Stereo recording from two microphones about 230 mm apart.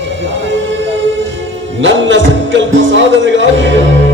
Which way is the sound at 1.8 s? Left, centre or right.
Right.